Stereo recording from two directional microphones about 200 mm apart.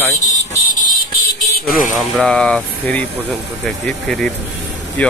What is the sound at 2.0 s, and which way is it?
Speech, 5° left (ahead or behind).